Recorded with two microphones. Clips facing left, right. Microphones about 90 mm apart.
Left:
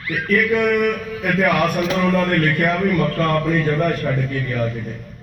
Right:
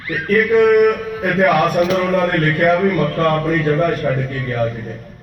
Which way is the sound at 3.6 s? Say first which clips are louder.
Right 3 dB; 15° right (ahead or behind).